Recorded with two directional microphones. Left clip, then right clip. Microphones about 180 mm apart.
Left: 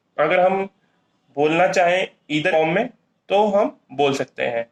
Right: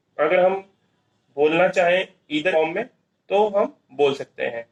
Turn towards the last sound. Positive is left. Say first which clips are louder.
# left 5 dB
turn(degrees=40)  # may be behind; listen again after turning